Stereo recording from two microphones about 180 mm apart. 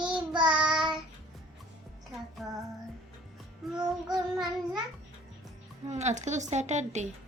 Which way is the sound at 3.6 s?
Centre (ahead or behind).